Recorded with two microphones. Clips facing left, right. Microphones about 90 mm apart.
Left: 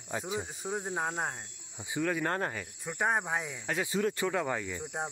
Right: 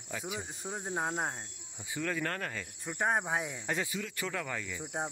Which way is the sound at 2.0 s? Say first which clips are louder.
Left 4 dB; 10° left (ahead or behind).